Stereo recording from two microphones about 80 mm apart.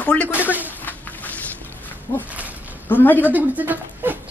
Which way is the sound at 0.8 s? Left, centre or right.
Left.